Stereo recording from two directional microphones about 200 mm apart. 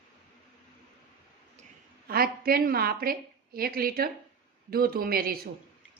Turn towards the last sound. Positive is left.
turn(degrees=-45)  # may be behind; listen again after turning